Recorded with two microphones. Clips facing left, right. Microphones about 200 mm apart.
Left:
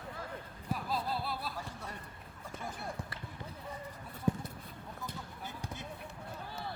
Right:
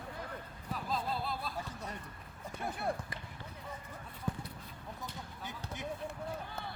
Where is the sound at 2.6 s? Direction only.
60° right (ahead or behind).